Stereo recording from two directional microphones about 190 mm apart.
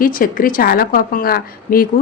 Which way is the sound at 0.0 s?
50° left (ahead or behind).